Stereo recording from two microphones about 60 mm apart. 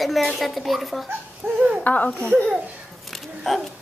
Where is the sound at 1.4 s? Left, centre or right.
Right.